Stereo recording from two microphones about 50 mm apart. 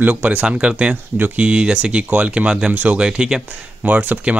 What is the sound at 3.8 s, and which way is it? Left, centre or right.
Speech, right.